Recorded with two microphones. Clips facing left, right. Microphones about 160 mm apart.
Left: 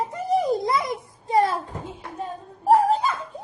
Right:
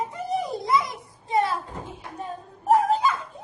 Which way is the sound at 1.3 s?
40° left (ahead or behind).